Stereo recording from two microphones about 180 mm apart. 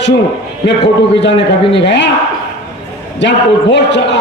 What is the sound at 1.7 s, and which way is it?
Speech, 75° left (ahead or behind).